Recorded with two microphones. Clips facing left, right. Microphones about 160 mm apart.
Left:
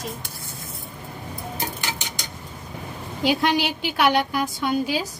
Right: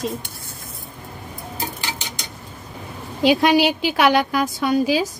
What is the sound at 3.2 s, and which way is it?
Speech, 90° right.